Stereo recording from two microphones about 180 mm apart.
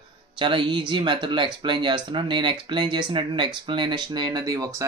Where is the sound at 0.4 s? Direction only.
25° right (ahead or behind).